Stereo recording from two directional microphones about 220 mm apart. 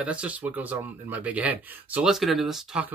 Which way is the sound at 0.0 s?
5° right (ahead or behind).